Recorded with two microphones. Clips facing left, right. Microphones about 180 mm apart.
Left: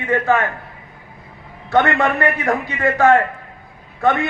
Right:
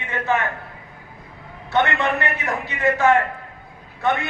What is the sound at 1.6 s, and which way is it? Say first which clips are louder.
A man's voice: left 4 dB; 50° left (ahead or behind).